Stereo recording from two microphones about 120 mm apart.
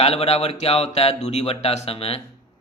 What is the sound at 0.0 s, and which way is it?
Speech, 55° left (ahead or behind).